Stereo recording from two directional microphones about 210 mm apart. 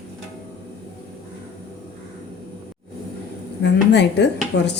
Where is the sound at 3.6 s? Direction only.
55° left (ahead or behind).